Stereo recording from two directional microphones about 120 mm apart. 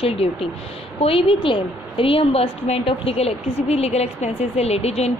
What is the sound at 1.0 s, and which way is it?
A woman's voice, 45° left (ahead or behind).